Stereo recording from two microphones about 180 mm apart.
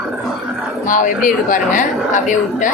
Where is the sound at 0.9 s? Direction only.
45° left (ahead or behind).